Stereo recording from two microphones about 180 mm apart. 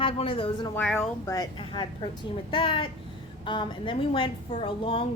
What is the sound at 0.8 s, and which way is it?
A woman's voice, 10° left (ahead or behind).